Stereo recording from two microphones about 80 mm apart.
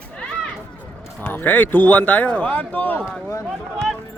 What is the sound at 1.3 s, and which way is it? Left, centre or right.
Speech, left.